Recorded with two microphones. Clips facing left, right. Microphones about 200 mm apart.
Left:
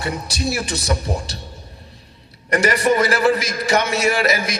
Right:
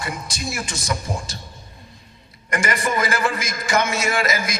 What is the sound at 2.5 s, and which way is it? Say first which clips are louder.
A man's voice: left 7 dB; 40° left (ahead or behind).